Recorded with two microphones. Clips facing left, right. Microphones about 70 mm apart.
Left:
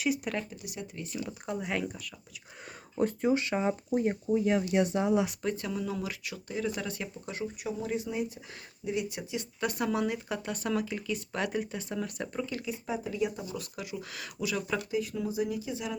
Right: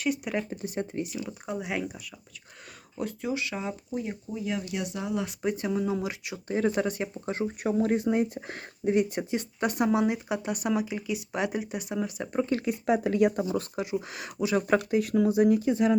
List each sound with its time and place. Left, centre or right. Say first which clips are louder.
0.5 s speech: right 9 dB; right
1.0 s speech: right 1 dB; centre
3.0 s speech: left 4 dB; left
5.4 s speech: right 5 dB; right
6.5 s speech: right 7 dB; right
6.8 s speech: right 7 dB; right
9.6 s speech: right 5 dB; right
12.0 s speech: right 2 dB; centre
12.5 s speech: right 8 dB; right
12.8 s speech: right 9 dB; right
13.4 s speech: right 9 dB; right
14.7 s speech: right 7 dB; right